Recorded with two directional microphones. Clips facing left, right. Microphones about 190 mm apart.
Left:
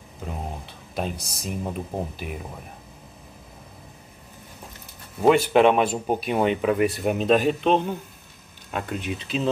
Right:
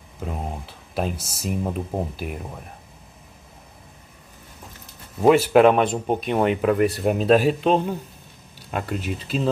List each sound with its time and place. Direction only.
0.2 s speech: 5° right (ahead or behind)
5.2 s speech: centre (ahead or behind)